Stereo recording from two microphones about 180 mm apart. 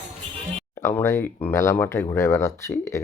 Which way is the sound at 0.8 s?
15° left (ahead or behind).